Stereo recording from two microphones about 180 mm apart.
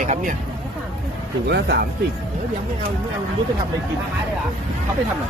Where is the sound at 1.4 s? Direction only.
65° right (ahead or behind).